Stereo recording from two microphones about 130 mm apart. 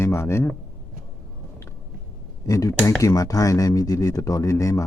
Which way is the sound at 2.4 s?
25° left (ahead or behind).